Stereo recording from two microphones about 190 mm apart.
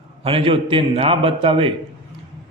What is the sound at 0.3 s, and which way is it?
A man's voice, 30° right (ahead or behind).